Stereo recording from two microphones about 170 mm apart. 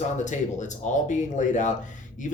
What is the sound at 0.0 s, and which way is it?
Speech, 45° left (ahead or behind).